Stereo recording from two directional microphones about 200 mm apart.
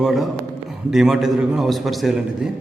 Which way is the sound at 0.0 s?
Centre (ahead or behind).